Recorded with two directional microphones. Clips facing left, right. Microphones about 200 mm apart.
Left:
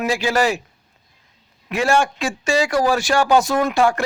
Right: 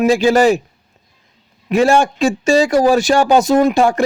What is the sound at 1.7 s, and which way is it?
Speech, 20° right (ahead or behind).